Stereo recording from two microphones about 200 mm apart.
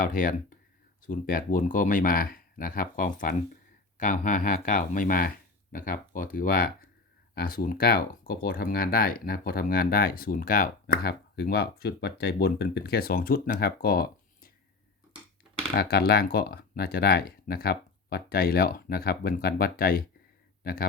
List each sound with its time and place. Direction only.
0.0 s speech: 45° left (ahead or behind)
15.7 s speech: 50° left (ahead or behind)